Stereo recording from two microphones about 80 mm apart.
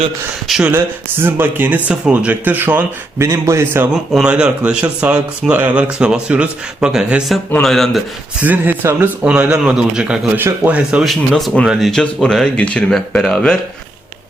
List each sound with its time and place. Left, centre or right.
0.7 s speech: right
1.9 s speech: centre
3.2 s a man's voice: right
4.1 s speech: centre
6.9 s speech: centre
8.4 s speech: centre
10.3 s speech: right
11.0 s speech: centre
11.9 s speech: centre